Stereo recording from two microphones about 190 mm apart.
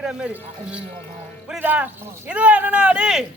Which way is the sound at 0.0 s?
5° right (ahead or behind).